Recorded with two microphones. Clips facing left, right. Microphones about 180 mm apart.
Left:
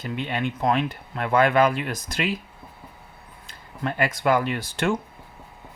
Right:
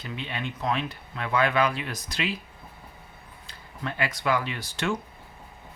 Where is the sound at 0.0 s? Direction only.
50° left (ahead or behind).